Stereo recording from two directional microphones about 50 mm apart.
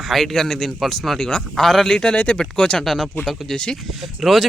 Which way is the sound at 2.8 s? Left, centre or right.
Centre.